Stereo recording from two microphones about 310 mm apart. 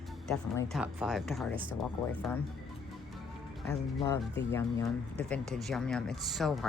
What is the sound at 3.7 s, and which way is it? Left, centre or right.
Speech, centre.